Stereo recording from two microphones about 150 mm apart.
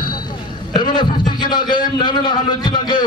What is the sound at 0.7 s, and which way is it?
A man's voice, 30° left (ahead or behind).